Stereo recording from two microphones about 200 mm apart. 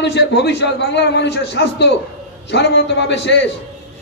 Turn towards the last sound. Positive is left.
turn(degrees=60)  # may be behind; listen again after turning